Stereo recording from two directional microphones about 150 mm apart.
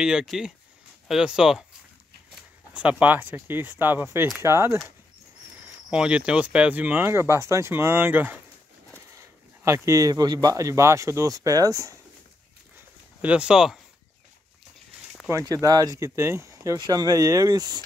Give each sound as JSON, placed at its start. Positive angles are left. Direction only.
{"t": 0.0, "sound": "speech", "side_deg": -5}
{"t": 5.9, "sound": "speech", "side_deg": -5}
{"t": 9.7, "sound": "speech", "side_deg": -20}
{"t": 13.2, "sound": "speech", "side_deg": -5}
{"t": 15.2, "sound": "speech", "side_deg": -20}